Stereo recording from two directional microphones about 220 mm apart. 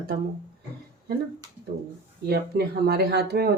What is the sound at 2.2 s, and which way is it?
Speech, 45° right (ahead or behind).